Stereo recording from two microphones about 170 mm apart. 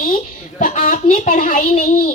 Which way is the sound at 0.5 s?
50° left (ahead or behind).